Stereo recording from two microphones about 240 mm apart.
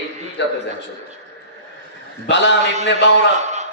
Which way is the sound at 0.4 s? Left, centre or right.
Left.